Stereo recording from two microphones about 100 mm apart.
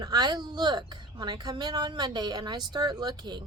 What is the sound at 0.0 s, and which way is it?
A woman's voice, 45° right (ahead or behind).